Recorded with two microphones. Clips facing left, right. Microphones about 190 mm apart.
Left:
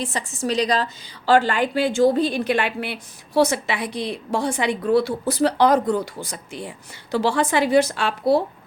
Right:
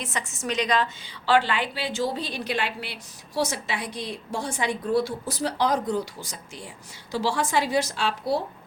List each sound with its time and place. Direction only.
0.0 s a woman's voice: 30° left (ahead or behind); by 8.4 s 55° left (ahead or behind)